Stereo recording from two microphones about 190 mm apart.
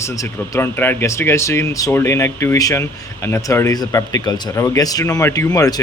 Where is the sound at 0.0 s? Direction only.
15° left (ahead or behind).